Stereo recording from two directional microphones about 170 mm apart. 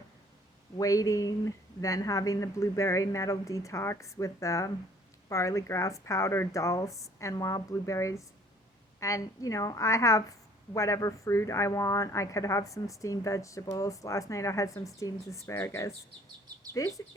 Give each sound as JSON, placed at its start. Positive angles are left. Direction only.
{"t": 0.8, "sound": "a woman's voice", "side_deg": 20}